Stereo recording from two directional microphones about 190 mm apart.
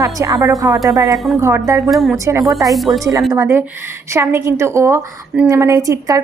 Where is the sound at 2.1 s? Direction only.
15° right (ahead or behind).